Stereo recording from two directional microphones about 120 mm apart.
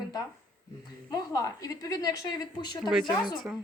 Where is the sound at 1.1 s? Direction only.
30° left (ahead or behind).